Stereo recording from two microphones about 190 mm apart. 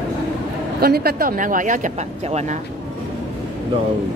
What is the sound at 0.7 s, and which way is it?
Speech, 55° right (ahead or behind).